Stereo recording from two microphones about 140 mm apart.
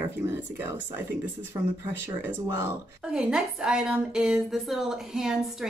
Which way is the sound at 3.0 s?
5° right (ahead or behind).